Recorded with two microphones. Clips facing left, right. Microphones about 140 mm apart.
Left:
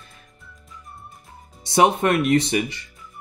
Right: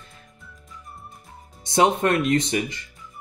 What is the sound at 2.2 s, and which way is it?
Speech, 70° left (ahead or behind).